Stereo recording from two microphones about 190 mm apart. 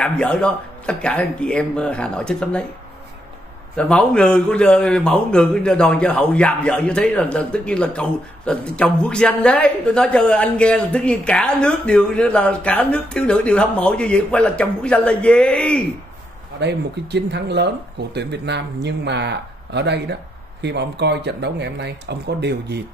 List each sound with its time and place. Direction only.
0.0 s a man's voice: 5° left (ahead or behind)
3.7 s a man's voice: 5° left (ahead or behind)
16.5 s speech: 65° right (ahead or behind)